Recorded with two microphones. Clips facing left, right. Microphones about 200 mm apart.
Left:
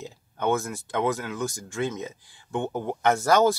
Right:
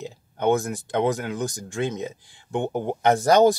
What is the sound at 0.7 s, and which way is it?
Speech, 20° right (ahead or behind).